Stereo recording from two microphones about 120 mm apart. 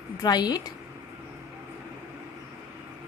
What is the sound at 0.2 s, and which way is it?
Speech, 35° left (ahead or behind).